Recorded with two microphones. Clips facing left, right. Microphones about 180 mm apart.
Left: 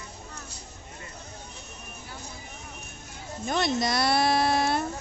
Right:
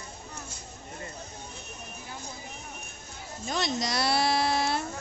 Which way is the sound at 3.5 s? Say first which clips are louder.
Left 4 dB; 55° left (ahead or behind).